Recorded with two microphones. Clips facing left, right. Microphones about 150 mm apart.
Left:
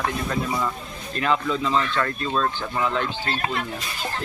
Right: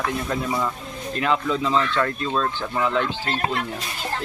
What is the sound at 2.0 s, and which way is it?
Speech, 5° right (ahead or behind).